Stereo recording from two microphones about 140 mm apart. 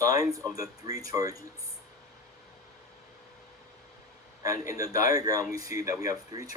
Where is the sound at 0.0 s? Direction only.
25° right (ahead or behind).